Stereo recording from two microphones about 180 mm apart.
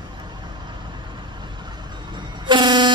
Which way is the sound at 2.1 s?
25° right (ahead or behind).